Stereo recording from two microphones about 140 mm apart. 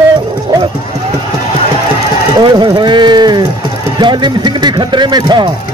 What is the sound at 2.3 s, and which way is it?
Speech, 35° right (ahead or behind).